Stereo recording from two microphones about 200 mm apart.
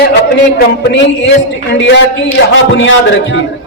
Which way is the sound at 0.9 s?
65° left (ahead or behind).